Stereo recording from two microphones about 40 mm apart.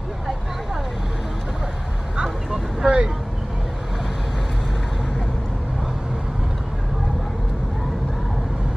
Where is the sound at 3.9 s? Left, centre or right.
Centre.